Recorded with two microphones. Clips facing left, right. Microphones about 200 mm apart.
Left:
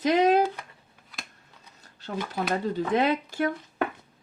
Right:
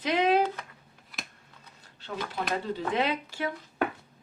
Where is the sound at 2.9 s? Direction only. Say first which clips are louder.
Left 6 dB; 45° left (ahead or behind).